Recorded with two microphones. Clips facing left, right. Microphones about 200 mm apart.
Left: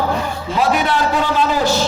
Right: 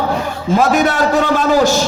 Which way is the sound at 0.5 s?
45° right (ahead or behind).